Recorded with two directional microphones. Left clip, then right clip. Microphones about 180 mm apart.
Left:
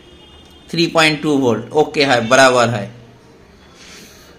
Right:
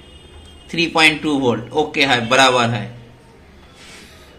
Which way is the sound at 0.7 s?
70° left (ahead or behind).